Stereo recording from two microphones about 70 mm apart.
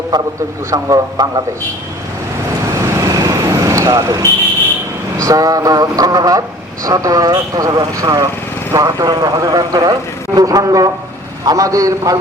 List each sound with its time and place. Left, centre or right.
0.1 s a man's voice: right
0.7 s speech: right
2.7 s vehicle: right
5.1 s a man's voice: right